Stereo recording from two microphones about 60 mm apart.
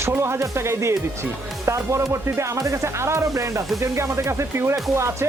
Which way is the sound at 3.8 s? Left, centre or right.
Right.